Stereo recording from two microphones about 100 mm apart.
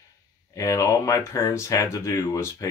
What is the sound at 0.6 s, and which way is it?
Speech, 30° left (ahead or behind).